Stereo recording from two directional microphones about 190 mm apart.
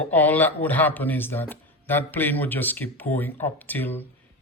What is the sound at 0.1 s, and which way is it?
Speech, 10° left (ahead or behind).